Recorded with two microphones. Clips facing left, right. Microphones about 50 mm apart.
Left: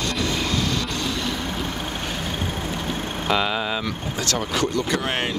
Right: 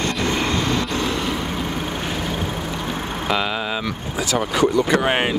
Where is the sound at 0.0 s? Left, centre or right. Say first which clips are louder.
Right 3 dB; right.